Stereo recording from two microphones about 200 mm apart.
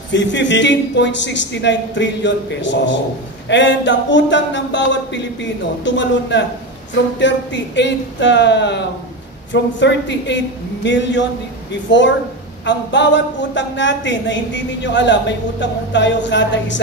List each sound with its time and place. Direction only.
0.1 s a woman's voice: 65° left (ahead or behind)